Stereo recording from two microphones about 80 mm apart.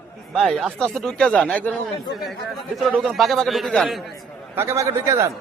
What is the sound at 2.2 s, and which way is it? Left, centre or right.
A man's voice, centre.